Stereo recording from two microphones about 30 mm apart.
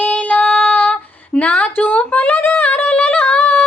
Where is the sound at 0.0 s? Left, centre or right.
Left.